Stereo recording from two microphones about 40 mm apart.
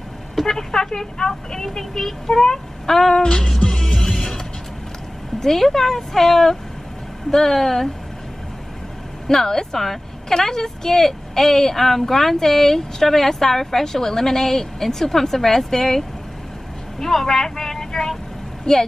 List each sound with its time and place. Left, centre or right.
0.4 s a woman's voice: centre
3.5 s music: centre
5.4 s a woman's voice: centre
9.3 s a woman's voice: centre
17.0 s speech: centre